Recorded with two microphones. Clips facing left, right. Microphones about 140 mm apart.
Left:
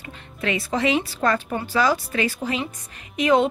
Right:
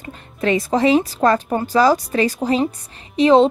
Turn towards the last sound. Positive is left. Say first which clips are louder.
# right 6 dB
turn(degrees=-30)  # may be behind; listen again after turning